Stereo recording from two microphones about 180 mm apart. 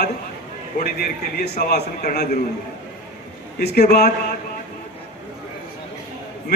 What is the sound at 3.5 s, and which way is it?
Speech, 65° left (ahead or behind).